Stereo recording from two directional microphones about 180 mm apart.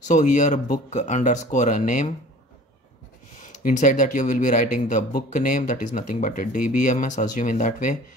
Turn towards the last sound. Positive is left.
turn(degrees=45)  # may be behind; listen again after turning